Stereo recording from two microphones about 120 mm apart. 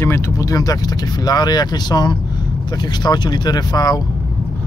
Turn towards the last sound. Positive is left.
turn(degrees=35)  # may be behind; listen again after turning